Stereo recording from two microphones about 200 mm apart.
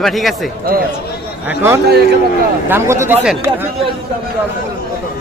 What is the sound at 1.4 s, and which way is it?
Speech, 15° right (ahead or behind).